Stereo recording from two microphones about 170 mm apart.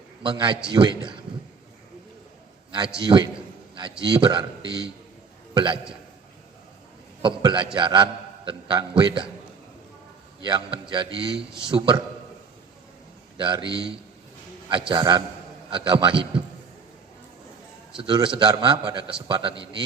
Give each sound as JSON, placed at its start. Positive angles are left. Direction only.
{"t": 0.2, "sound": "a man's voice", "side_deg": -25}
{"t": 3.0, "sound": "a man's voice", "side_deg": -25}
{"t": 7.2, "sound": "a man's voice", "side_deg": -30}
{"t": 10.4, "sound": "a man's voice", "side_deg": -30}
{"t": 13.3, "sound": "a man's voice", "side_deg": -30}
{"t": 17.9, "sound": "a man's voice", "side_deg": -30}